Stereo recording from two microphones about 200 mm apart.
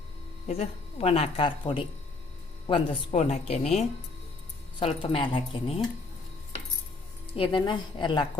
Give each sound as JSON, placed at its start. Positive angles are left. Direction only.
{"t": 0.4, "sound": "speech", "side_deg": 30}
{"t": 7.3, "sound": "speech", "side_deg": 25}